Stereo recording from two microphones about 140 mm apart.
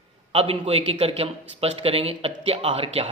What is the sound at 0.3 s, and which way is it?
Speech, 45° right (ahead or behind).